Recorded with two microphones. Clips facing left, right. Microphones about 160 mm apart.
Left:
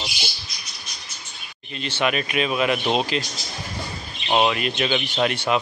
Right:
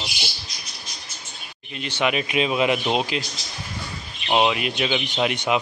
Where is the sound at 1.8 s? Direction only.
15° right (ahead or behind).